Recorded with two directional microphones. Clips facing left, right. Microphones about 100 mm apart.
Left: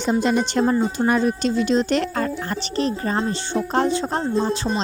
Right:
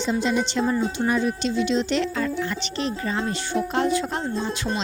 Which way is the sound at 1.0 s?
55° left (ahead or behind).